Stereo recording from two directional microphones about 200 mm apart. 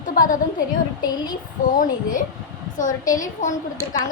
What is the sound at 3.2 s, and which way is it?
Child singing, 40° left (ahead or behind).